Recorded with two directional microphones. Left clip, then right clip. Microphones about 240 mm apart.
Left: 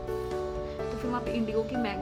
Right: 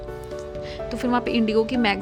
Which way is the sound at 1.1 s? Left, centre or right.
Right.